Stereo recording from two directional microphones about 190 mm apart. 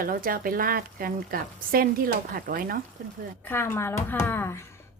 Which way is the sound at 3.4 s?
10° left (ahead or behind).